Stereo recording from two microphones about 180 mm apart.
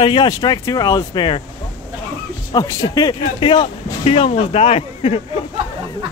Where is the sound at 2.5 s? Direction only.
20° left (ahead or behind).